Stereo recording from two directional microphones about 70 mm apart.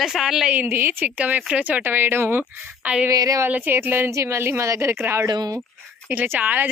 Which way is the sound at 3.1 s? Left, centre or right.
Right.